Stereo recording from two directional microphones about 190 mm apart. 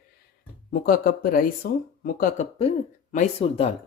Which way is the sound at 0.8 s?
50° left (ahead or behind).